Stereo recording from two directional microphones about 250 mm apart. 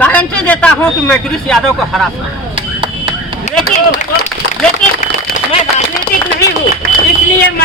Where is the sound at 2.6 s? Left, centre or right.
Centre.